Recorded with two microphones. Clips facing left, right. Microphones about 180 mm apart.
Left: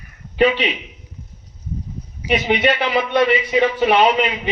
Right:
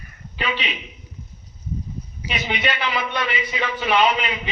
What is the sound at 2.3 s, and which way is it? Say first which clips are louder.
Speech: left 9 dB; 30° left (ahead or behind).